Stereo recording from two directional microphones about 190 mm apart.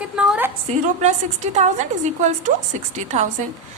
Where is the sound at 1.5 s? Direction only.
40° right (ahead or behind).